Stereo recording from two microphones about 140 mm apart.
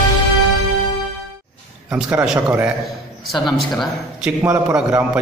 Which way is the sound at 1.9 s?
10° right (ahead or behind).